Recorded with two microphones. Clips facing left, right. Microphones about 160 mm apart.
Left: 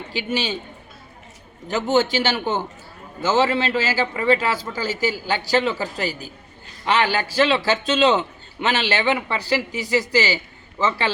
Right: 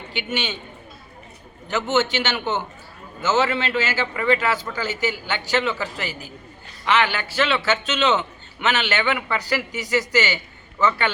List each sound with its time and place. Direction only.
0.1 s a man's voice: 35° left (ahead or behind)
1.6 s a man's voice: 35° left (ahead or behind)